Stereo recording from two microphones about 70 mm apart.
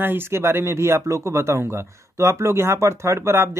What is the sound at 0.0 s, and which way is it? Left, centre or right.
Speech, right.